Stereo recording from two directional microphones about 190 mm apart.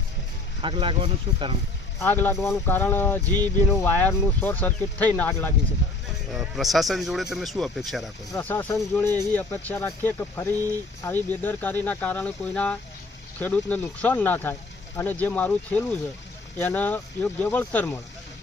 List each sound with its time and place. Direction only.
0.6 s speech: 25° right (ahead or behind)
2.0 s speech: 10° left (ahead or behind)
6.3 s speech: centre (ahead or behind)
8.3 s speech: 10° left (ahead or behind)